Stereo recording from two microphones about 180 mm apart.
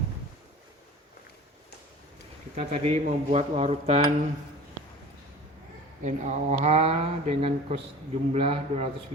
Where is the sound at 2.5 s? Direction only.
35° right (ahead or behind).